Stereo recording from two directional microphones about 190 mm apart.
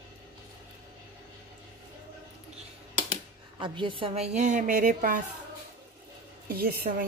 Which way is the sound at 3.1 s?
25° right (ahead or behind).